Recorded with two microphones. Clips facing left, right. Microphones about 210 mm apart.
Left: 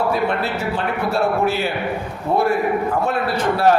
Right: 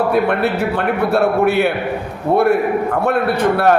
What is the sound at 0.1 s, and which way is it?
A man's voice, 60° right (ahead or behind).